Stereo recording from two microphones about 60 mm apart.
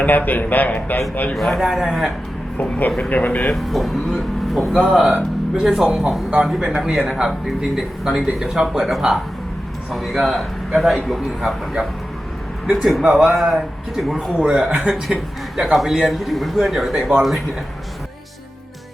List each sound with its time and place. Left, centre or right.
0.0 s speech: left
1.3 s speech: centre
1.6 s speech: centre
2.6 s speech: left
3.5 s speech: centre
13.1 s speech: centre
13.3 s speech: centre
17.0 s speech: centre